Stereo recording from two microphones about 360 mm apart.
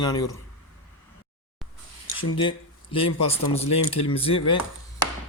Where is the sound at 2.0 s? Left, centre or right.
Left.